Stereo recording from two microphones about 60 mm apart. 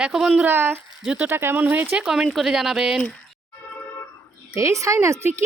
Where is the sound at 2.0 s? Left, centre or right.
Centre.